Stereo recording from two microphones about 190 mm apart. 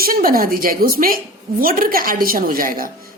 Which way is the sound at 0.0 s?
50° right (ahead or behind).